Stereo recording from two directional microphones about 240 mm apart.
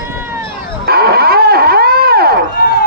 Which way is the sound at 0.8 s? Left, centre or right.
Right.